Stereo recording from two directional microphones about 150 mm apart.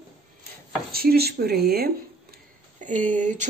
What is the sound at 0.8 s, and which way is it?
Speech, 90° right.